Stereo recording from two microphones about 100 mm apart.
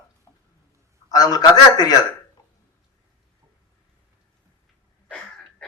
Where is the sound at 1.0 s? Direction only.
40° left (ahead or behind).